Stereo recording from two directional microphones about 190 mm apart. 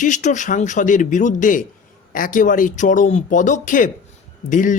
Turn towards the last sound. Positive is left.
turn(degrees=45)  # may be behind; listen again after turning